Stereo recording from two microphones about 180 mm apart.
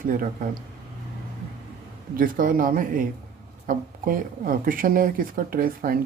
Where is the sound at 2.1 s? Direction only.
50° right (ahead or behind).